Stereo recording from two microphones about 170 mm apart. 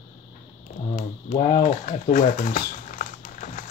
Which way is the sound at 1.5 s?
50° left (ahead or behind).